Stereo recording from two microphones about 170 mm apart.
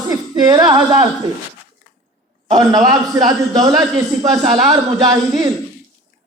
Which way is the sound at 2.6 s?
20° right (ahead or behind).